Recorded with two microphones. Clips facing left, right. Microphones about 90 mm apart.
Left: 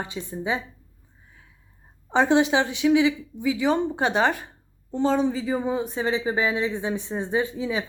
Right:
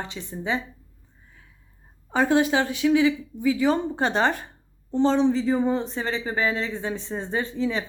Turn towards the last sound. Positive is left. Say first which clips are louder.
# left 1 dB
turn(degrees=10)  # may be behind; listen again after turning